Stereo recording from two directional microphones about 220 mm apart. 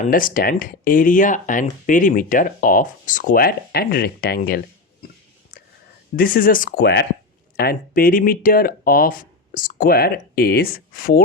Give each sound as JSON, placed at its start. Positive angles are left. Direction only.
{"t": 0.1, "sound": "speech", "side_deg": 40}
{"t": 6.1, "sound": "speech", "side_deg": 40}